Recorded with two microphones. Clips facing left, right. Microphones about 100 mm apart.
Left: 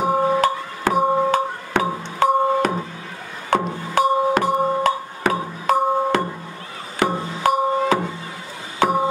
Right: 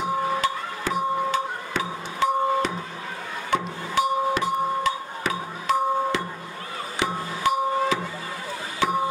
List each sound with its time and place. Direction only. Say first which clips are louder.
0.0 s music: left 6 dB; 50° left (ahead or behind)